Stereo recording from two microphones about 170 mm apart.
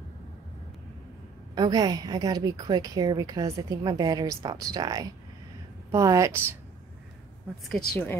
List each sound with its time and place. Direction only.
1.5 s a woman's voice: 25° right (ahead or behind)
7.7 s speech: 10° left (ahead or behind)